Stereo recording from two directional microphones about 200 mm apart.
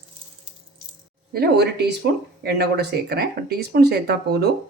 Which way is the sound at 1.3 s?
55° right (ahead or behind).